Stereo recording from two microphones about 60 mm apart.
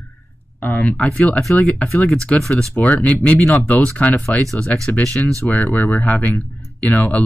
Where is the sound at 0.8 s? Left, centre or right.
Centre.